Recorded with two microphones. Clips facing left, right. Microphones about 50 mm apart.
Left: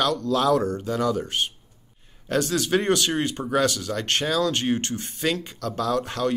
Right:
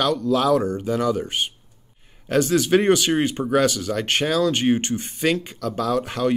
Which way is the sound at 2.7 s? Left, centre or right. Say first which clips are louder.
Right 3 dB; right.